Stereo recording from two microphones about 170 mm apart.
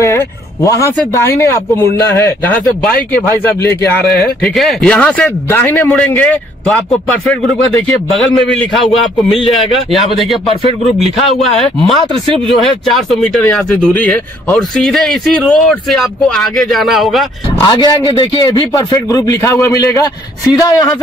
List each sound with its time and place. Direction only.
0.0 s a man's voice: 15° left (ahead or behind); by 10.5 s centre (ahead or behind)
11.5 s a man's voice: centre (ahead or behind)
17.6 s a man's voice: 25° left (ahead or behind)